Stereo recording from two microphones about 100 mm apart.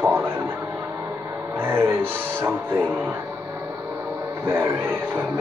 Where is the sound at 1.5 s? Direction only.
20° right (ahead or behind).